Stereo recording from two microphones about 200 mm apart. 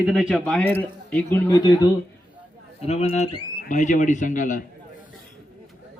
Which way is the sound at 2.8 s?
30° left (ahead or behind).